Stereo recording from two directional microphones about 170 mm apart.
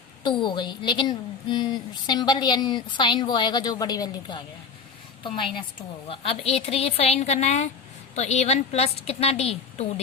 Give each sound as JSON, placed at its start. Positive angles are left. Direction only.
{"t": 0.2, "sound": "a woman's voice", "side_deg": 25}